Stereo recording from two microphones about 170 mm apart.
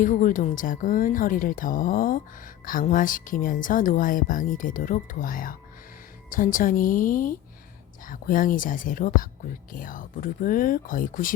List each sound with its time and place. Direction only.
0.0 s speech: 50° left (ahead or behind)